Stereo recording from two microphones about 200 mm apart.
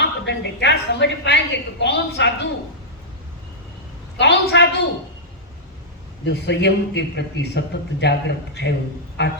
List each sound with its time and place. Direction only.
0.0 s a woman's voice: 60° left (ahead or behind)
4.2 s a man's voice: 60° left (ahead or behind)
6.2 s a man's voice: 60° left (ahead or behind)